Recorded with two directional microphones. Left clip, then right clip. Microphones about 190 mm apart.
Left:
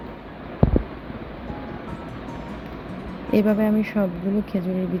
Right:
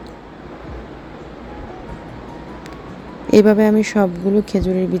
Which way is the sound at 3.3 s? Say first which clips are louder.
Right 9 dB; 55° right (ahead or behind).